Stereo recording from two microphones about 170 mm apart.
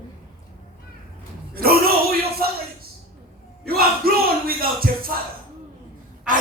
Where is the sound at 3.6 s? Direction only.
60° right (ahead or behind).